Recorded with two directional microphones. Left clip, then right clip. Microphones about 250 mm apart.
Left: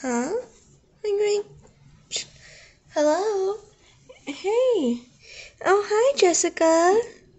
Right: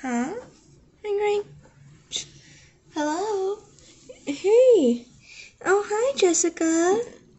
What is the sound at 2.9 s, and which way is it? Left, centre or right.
Speech, left.